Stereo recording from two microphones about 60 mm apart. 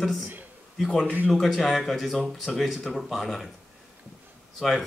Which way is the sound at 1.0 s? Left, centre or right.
Right.